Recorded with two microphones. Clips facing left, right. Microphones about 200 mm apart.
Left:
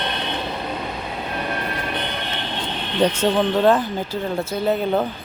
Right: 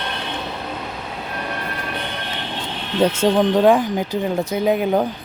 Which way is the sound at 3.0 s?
5° right (ahead or behind).